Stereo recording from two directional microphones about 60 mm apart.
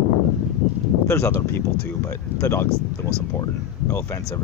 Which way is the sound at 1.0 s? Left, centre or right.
Left.